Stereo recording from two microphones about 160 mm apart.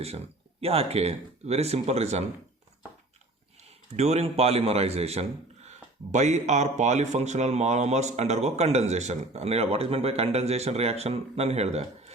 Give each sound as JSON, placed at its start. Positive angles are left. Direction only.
{"t": 0.6, "sound": "speech", "side_deg": -40}
{"t": 3.6, "sound": "speech", "side_deg": -45}